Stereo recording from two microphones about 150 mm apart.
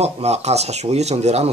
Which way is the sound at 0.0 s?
45° right (ahead or behind).